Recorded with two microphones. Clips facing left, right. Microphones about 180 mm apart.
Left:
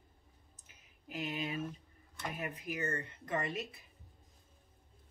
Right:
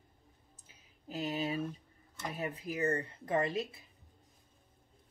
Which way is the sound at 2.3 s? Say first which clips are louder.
Right 4 dB; 35° right (ahead or behind).